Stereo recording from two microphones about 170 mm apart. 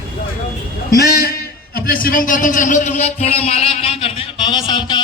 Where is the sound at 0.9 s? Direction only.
65° left (ahead or behind).